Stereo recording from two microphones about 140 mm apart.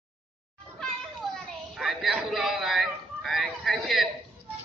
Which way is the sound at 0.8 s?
5° left (ahead or behind).